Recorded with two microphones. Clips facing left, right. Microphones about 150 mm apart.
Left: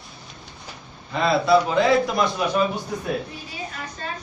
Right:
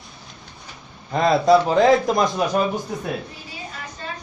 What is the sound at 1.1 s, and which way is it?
A man's voice, 40° right (ahead or behind).